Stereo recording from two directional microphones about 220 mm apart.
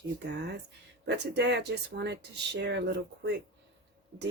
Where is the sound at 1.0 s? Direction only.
50° right (ahead or behind).